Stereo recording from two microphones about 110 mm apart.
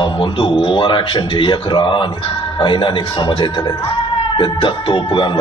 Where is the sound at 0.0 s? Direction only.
50° left (ahead or behind).